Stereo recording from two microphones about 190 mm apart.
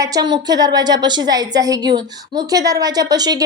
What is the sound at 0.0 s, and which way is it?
A woman's voice, 20° right (ahead or behind).